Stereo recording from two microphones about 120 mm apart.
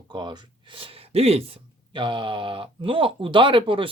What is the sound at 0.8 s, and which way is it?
Speech, 55° right (ahead or behind).